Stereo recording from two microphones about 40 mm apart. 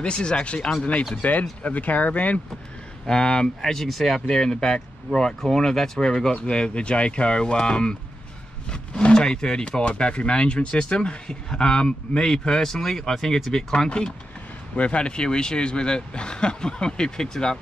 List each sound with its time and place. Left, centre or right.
0.0 s speech: left
1.2 s speech: left
3.1 s speech: left
13.7 s speech: left